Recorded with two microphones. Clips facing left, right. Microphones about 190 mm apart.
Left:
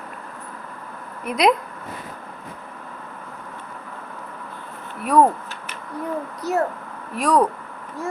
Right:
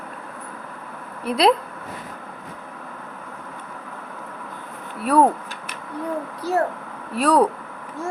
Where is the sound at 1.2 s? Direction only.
30° right (ahead or behind).